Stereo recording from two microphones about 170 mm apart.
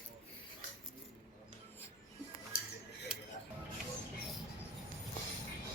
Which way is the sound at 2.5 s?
60° left (ahead or behind).